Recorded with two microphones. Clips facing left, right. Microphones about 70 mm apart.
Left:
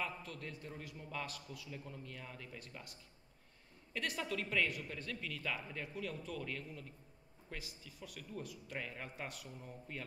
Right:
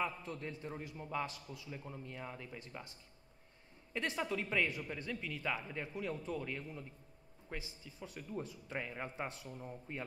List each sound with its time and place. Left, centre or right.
0.0 s speech: right